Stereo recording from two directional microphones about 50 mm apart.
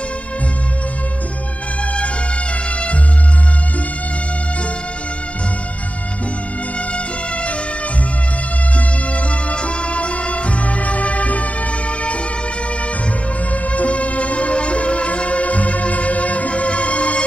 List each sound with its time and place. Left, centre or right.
8.7 s music: left
13.5 s music: left